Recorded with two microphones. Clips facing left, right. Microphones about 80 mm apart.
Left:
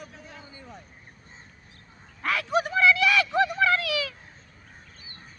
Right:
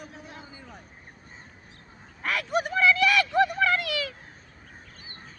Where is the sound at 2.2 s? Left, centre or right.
Centre.